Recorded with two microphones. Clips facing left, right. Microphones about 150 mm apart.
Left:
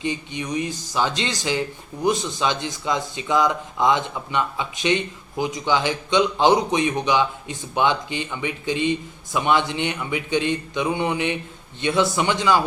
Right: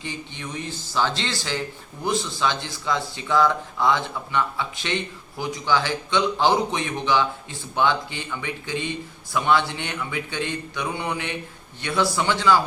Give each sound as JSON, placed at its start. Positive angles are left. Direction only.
{"t": 0.0, "sound": "speech", "side_deg": 15}